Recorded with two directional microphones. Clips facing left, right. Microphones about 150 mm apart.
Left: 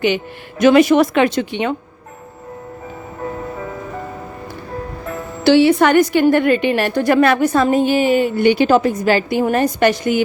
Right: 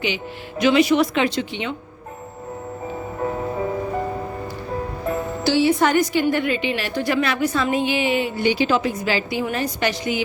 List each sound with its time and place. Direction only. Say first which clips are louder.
0.6 s a woman's voice: left 6 dB; 50° left (ahead or behind)
5.4 s a woman's voice: left 7 dB; 70° left (ahead or behind); by 10.2 s 50° left (ahead or behind)